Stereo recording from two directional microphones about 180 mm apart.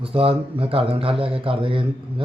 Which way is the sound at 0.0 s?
30° right (ahead or behind).